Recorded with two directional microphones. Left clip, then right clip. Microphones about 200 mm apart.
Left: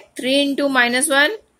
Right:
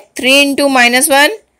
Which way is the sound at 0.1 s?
35° right (ahead or behind).